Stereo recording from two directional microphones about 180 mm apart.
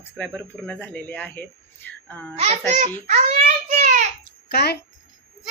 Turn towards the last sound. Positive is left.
turn(degrees=65)  # may be behind; listen again after turning